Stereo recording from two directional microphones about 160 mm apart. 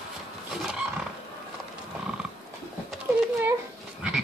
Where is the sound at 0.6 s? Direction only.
5° right (ahead or behind).